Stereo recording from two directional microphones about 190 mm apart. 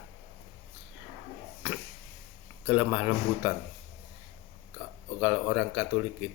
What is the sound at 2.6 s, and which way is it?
Speech, 5° right (ahead or behind).